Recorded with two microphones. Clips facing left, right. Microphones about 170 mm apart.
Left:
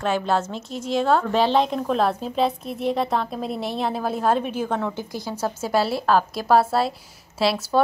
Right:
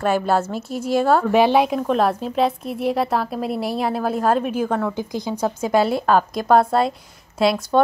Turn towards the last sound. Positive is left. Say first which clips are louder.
# right 3 dB
turn(degrees=0)  # may be behind; listen again after turning